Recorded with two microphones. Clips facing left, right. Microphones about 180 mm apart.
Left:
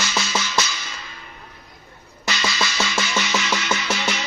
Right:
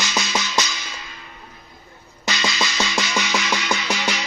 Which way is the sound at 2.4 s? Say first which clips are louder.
Even; 15° right (ahead or behind).